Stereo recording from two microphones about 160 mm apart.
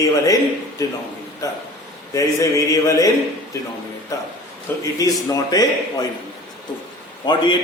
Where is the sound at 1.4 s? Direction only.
20° left (ahead or behind).